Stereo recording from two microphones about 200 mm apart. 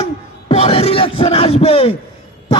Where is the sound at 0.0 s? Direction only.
30° left (ahead or behind).